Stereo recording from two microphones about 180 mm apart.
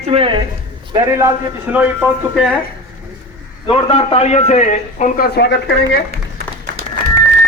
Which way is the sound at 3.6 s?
30° left (ahead or behind).